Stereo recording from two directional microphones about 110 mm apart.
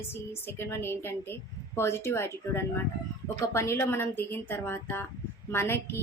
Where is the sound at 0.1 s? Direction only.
20° left (ahead or behind).